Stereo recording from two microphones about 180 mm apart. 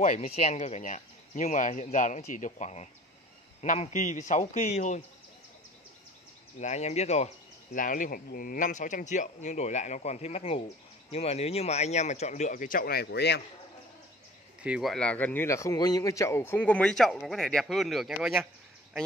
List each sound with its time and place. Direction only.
0.0 s speech: 40° left (ahead or behind)
6.6 s speech: 40° left (ahead or behind); by 13.4 s 70° left (ahead or behind)
14.6 s speech: 5° right (ahead or behind)